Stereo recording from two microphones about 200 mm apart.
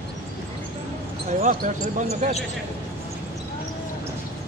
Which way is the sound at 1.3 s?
40° right (ahead or behind).